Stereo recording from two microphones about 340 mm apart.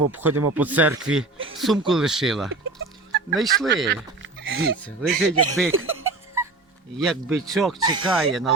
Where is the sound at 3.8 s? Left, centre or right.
Right.